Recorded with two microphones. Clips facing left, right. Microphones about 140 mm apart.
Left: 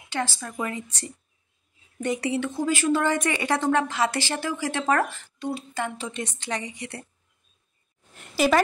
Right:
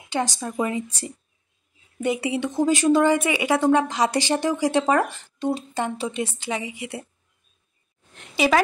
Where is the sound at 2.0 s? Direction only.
10° right (ahead or behind).